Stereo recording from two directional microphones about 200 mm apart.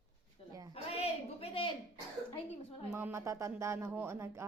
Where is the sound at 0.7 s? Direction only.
30° left (ahead or behind).